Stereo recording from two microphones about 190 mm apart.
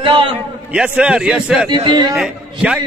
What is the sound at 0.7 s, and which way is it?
Speech, 5° right (ahead or behind).